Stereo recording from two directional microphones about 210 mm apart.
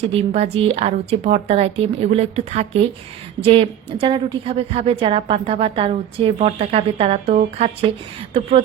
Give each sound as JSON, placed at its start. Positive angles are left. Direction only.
{"t": 0.1, "sound": "a woman's voice", "side_deg": -30}